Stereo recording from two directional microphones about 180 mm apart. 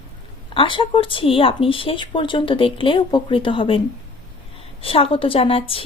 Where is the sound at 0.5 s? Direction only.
30° left (ahead or behind).